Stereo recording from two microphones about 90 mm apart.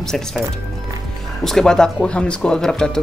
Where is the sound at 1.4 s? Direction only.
5° left (ahead or behind).